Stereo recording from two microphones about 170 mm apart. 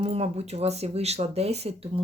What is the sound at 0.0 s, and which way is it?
Speech, 35° right (ahead or behind).